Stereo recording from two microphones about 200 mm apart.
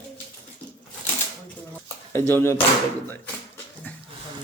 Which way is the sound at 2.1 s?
10° left (ahead or behind).